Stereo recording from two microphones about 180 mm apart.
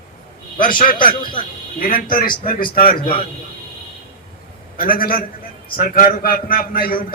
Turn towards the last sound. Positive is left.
turn(degrees=55)  # may be behind; listen again after turning